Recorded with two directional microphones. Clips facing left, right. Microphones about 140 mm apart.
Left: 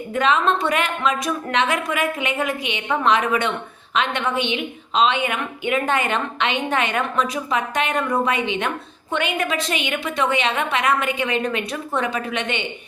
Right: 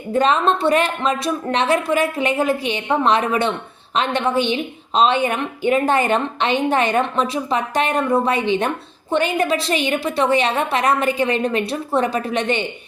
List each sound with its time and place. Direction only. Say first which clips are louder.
0.1 s a woman's voice: right 3 dB; 35° right (ahead or behind)